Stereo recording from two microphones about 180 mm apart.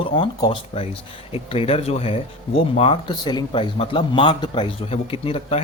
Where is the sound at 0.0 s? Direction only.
30° left (ahead or behind).